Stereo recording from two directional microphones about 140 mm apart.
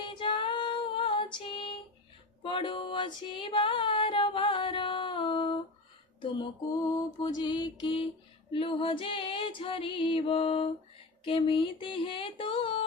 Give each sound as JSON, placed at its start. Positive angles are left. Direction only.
{"t": 0.0, "sound": "female singing", "side_deg": 35}
{"t": 2.4, "sound": "music", "side_deg": 35}